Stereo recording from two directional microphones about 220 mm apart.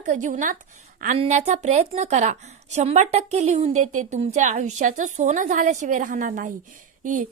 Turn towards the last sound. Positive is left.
turn(degrees=-35)  # may be behind; listen again after turning